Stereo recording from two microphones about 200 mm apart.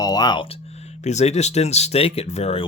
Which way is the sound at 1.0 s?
35° left (ahead or behind).